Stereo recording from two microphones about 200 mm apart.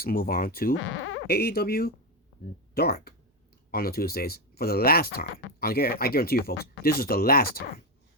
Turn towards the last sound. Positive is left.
turn(degrees=50)  # may be behind; listen again after turning